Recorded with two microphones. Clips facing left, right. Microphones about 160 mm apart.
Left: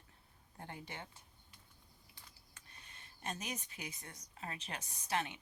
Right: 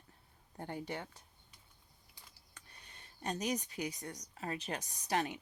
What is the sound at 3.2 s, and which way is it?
Speech, 35° right (ahead or behind).